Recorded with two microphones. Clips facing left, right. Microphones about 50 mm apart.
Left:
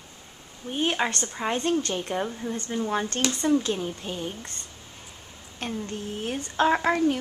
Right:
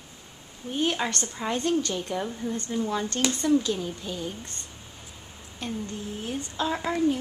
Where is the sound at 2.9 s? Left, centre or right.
Left.